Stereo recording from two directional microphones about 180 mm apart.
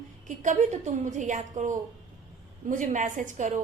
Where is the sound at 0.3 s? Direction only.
45° right (ahead or behind).